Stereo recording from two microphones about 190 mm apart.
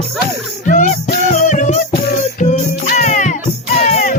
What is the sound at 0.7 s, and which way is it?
Music, 40° left (ahead or behind).